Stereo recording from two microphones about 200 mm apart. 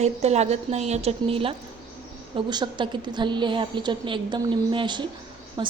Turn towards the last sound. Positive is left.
turn(degrees=-20)  # may be behind; listen again after turning